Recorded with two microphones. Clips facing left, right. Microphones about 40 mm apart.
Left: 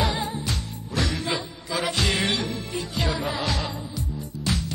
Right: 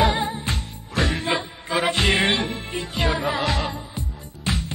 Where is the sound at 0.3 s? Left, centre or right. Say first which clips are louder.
Right 2 dB; right.